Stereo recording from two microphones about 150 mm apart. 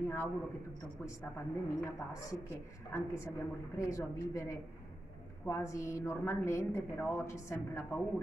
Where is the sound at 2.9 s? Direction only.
20° left (ahead or behind).